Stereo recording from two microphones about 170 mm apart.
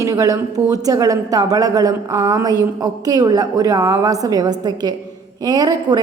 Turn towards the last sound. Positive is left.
turn(degrees=-25)  # may be behind; listen again after turning